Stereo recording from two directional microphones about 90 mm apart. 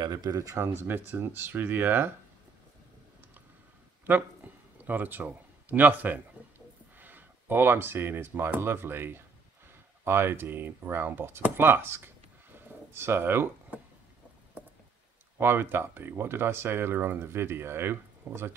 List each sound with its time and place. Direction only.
0.0 s speech: 50° right (ahead or behind)
0.7 s speech: 25° right (ahead or behind)
4.0 s speech: 20° right (ahead or behind)
15.3 s speech: 25° right (ahead or behind)